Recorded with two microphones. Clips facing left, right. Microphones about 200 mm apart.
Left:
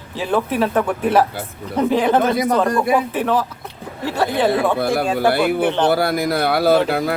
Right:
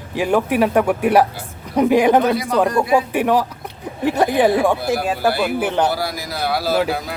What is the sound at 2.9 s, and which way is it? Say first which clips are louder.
Speech: right 2 dB; 10° right (ahead or behind).